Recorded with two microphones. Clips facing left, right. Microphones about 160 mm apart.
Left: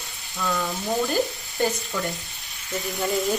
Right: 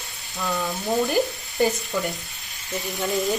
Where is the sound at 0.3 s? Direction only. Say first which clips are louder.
Even; 20° right (ahead or behind).